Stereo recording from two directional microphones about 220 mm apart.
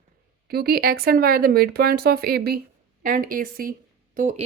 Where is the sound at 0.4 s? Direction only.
45° right (ahead or behind).